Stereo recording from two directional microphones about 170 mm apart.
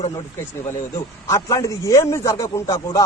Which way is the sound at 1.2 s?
20° left (ahead or behind).